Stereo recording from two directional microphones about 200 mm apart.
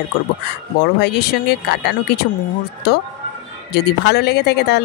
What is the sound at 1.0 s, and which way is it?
Speech, 55° left (ahead or behind).